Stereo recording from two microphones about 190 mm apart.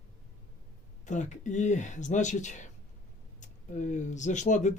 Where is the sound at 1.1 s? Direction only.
40° left (ahead or behind).